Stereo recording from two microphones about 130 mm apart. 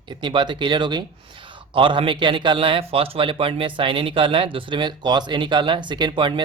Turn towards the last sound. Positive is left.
turn(degrees=-35)  # may be behind; listen again after turning